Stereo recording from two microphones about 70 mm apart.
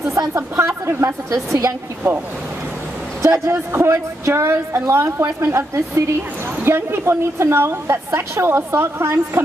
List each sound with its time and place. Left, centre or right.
0.3 s a woman's voice: right
1.3 s a woman's voice: right
3.2 s a woman's voice: right